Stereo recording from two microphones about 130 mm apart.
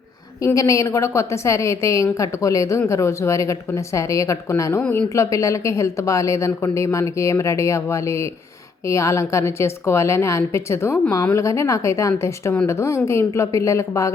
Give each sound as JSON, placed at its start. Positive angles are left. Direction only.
{"t": 0.4, "sound": "a woman's voice", "side_deg": 25}
{"t": 4.8, "sound": "speech", "side_deg": 15}
{"t": 5.0, "sound": "a woman's voice", "side_deg": 25}